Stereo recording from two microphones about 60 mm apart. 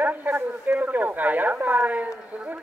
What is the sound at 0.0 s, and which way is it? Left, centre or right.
A man's voice, right.